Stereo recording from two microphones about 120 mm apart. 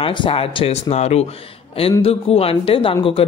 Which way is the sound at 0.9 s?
60° left (ahead or behind).